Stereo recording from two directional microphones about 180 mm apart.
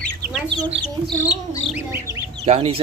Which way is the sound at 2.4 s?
35° right (ahead or behind).